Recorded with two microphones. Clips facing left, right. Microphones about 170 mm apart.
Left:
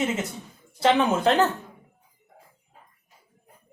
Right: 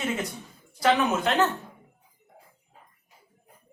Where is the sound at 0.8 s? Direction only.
25° left (ahead or behind).